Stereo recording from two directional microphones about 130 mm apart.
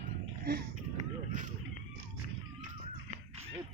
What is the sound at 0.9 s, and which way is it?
Run, 60° right (ahead or behind).